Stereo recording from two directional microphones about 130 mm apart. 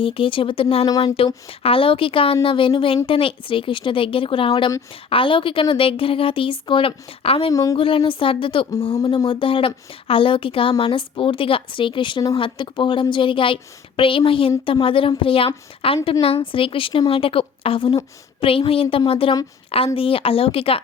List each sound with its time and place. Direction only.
0.0 s speech: 45° left (ahead or behind)
7.5 s speech: 25° left (ahead or behind)
7.8 s a woman's voice: 45° left (ahead or behind)